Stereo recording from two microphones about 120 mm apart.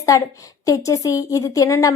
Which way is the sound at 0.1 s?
30° left (ahead or behind).